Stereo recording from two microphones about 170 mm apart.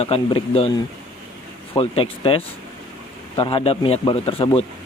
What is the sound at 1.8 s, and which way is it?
Speech, 35° left (ahead or behind).